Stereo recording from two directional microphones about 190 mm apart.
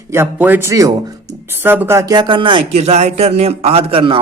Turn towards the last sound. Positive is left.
turn(degrees=-30)  # may be behind; listen again after turning